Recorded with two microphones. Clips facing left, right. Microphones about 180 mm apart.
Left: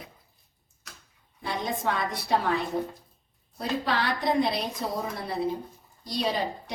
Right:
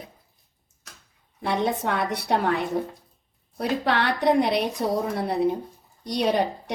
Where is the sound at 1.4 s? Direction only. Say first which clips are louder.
Right 5 dB; 65° right (ahead or behind).